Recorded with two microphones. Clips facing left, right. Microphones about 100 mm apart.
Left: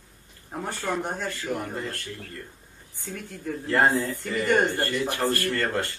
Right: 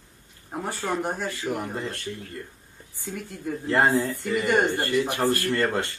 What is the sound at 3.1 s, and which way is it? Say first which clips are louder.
Speech: right 1 dB; 5° right (ahead or behind).